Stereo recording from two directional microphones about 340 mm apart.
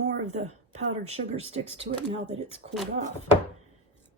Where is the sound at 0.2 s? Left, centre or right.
Centre.